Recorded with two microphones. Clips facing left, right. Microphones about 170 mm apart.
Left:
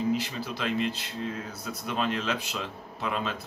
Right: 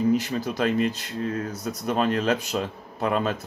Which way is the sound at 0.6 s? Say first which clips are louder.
Right 5 dB; 45° right (ahead or behind).